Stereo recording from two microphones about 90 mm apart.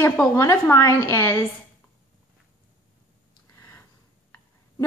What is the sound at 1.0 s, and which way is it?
Speech, 25° left (ahead or behind).